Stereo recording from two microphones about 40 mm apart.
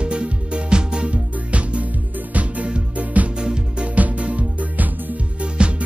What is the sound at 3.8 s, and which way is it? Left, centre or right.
Music, right.